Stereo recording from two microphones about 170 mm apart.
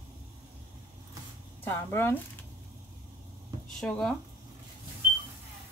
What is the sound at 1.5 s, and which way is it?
Speech, 15° left (ahead or behind).